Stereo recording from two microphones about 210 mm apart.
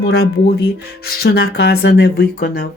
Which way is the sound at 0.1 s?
50° left (ahead or behind).